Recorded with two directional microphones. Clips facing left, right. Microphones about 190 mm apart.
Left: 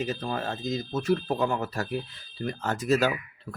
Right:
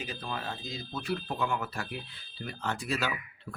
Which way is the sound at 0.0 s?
45° left (ahead or behind).